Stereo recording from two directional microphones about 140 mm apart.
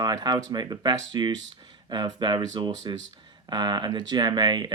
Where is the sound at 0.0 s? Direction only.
30° right (ahead or behind).